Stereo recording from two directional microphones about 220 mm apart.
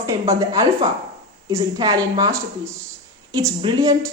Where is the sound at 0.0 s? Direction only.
15° right (ahead or behind).